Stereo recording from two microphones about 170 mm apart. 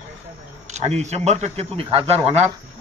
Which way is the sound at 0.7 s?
40° right (ahead or behind).